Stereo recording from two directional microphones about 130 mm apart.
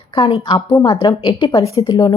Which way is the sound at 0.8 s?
40° left (ahead or behind).